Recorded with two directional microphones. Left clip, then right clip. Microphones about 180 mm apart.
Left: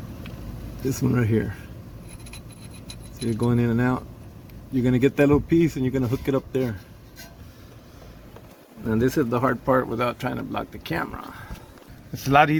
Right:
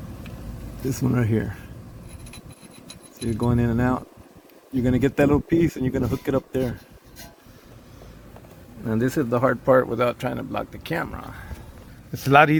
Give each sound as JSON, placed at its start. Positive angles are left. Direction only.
{"t": 0.9, "sound": "speech", "side_deg": -15}
{"t": 3.3, "sound": "speech", "side_deg": -15}
{"t": 8.9, "sound": "speech", "side_deg": -25}
{"t": 12.1, "sound": "speech", "side_deg": -30}